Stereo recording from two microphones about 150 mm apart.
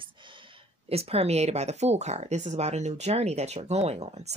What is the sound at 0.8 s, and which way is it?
Speech, 40° right (ahead or behind).